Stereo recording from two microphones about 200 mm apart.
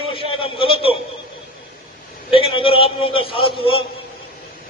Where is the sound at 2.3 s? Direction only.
25° left (ahead or behind).